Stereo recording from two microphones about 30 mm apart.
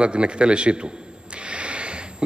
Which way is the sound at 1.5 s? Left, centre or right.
Right.